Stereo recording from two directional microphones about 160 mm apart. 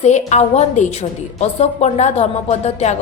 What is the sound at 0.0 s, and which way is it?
A woman's voice, 45° left (ahead or behind).